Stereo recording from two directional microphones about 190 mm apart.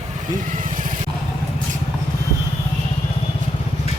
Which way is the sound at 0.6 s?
45° right (ahead or behind).